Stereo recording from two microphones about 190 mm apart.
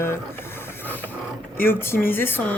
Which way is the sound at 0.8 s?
10° left (ahead or behind).